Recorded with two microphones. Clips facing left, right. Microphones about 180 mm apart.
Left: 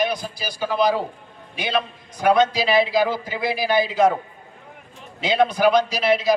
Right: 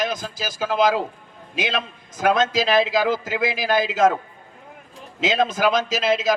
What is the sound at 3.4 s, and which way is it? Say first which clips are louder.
Speech: left 2 dB; 90° right.